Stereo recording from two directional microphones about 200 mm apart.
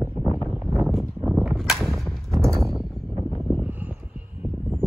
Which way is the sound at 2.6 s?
Centre (ahead or behind).